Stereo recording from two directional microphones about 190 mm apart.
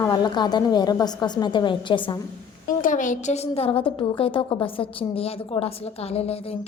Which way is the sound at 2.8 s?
45° left (ahead or behind).